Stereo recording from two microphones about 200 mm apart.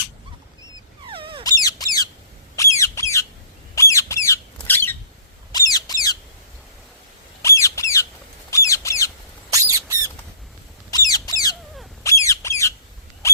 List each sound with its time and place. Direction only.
0.6 s wail: 25° right (ahead or behind)
1.5 s squawk: 20° left (ahead or behind)
5.5 s bird: 20° left (ahead or behind)
7.4 s squawk: 15° left (ahead or behind)
8.4 s bird: 15° left (ahead or behind)
9.5 s a sound: 15° right (ahead or behind)
10.9 s squawk: 20° left (ahead or behind)